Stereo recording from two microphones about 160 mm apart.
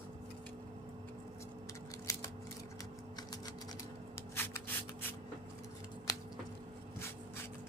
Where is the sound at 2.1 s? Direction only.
20° left (ahead or behind).